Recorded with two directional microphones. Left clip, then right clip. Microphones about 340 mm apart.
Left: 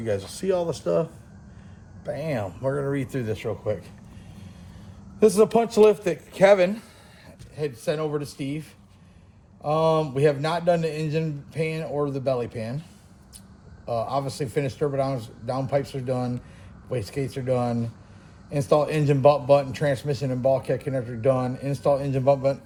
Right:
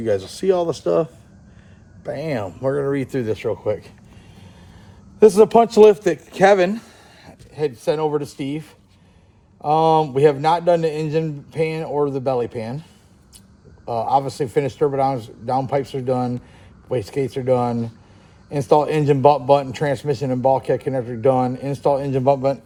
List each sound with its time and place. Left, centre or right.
0.0 s a man's voice: right
2.0 s a man's voice: right
5.2 s a man's voice: right
13.8 s a man's voice: right